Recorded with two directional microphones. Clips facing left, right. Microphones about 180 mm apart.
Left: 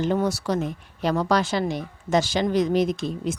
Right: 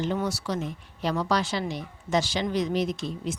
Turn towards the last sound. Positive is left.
turn(degrees=50)  # may be behind; listen again after turning